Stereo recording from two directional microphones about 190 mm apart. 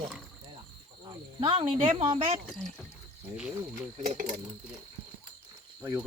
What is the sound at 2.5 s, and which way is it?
Speech, 5° left (ahead or behind).